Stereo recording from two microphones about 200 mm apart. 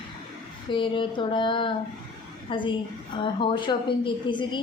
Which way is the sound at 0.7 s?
25° left (ahead or behind).